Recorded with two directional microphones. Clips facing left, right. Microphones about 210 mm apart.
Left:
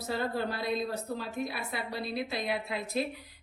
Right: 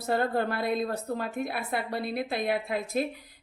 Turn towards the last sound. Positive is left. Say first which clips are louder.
# right 4 dB
turn(degrees=-50)  # may be behind; listen again after turning